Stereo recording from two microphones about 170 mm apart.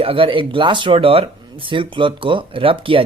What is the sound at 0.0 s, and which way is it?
Speech, 30° right (ahead or behind).